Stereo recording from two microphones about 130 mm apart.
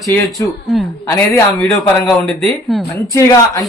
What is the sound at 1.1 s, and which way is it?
Speech, 20° left (ahead or behind).